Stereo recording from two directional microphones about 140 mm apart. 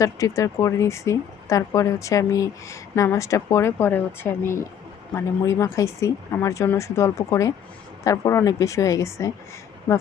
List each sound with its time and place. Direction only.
0.0 s speech: 25° left (ahead or behind)